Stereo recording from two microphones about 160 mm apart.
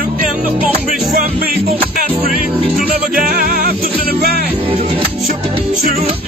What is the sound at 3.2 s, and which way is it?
Music, 60° right (ahead or behind).